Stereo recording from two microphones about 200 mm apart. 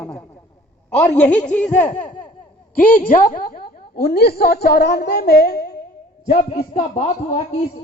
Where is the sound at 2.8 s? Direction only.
45° left (ahead or behind).